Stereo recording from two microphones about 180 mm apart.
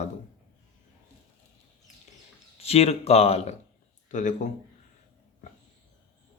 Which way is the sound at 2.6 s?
35° left (ahead or behind).